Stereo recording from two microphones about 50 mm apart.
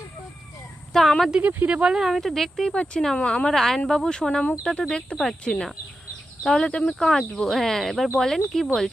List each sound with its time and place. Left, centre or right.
0.9 s speech: centre
1.4 s speech: right
1.7 s speech: centre
2.7 s a woman's voice: centre
3.5 s speech: centre
6.7 s a woman's voice: left
7.0 s speech: centre